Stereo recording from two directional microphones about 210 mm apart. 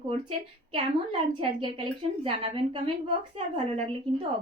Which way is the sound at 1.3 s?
25° right (ahead or behind).